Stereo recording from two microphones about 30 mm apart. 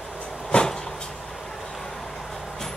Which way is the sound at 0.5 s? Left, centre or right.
Left.